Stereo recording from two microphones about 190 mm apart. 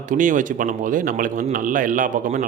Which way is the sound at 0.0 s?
45° right (ahead or behind).